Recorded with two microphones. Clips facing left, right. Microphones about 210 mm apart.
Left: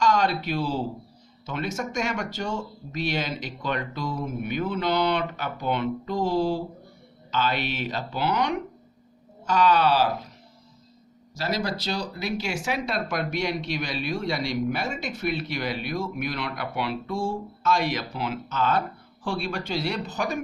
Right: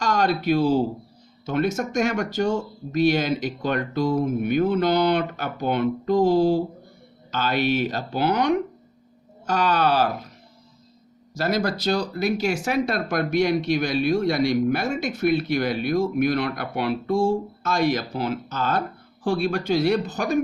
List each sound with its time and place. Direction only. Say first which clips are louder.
0.0 s speech: right 1 dB; 50° right (ahead or behind)
11.3 s speech: right 5 dB; 50° right (ahead or behind)